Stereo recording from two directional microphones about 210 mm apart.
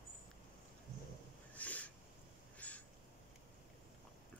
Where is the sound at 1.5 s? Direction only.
5° left (ahead or behind).